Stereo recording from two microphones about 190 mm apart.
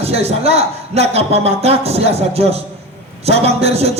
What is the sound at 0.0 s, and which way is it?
Speech, 35° right (ahead or behind).